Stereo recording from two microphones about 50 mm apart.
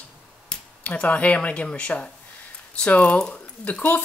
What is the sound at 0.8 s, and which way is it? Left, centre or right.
Speech, left.